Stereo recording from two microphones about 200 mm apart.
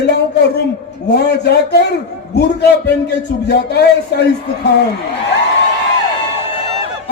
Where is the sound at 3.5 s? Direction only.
55° left (ahead or behind).